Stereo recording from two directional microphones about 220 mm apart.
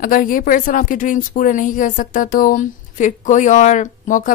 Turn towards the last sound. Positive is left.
turn(degrees=35)  # may be behind; listen again after turning